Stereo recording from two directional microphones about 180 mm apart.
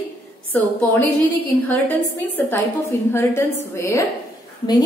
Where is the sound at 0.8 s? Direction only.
10° left (ahead or behind).